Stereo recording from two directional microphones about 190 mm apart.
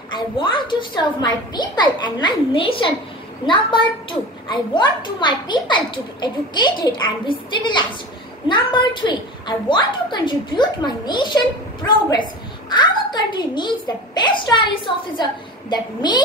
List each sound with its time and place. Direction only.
0.1 s a child's voice: 25° left (ahead or behind)
15.7 s a child's voice: 25° left (ahead or behind)